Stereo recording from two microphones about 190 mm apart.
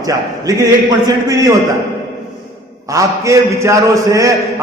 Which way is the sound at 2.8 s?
15° right (ahead or behind).